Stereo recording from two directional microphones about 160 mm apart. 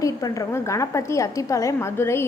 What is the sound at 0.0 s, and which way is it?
A woman's voice, 20° left (ahead or behind).